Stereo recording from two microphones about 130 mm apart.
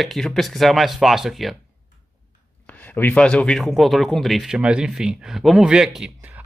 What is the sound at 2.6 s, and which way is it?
Speech, 10° left (ahead or behind).